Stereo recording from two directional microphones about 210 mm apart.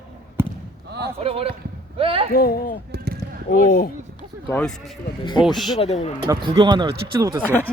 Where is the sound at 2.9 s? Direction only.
50° right (ahead or behind).